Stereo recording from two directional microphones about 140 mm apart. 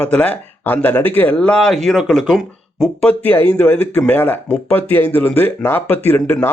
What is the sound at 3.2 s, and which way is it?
Speech, 10° left (ahead or behind).